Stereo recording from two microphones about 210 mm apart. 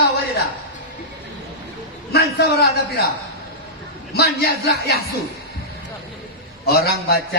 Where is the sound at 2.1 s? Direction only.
50° left (ahead or behind).